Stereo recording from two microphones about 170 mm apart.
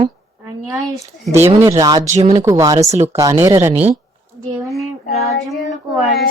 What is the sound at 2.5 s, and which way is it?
Speech, 20° right (ahead or behind).